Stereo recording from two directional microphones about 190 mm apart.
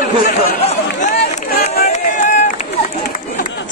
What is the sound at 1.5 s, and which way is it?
Run, 45° left (ahead or behind).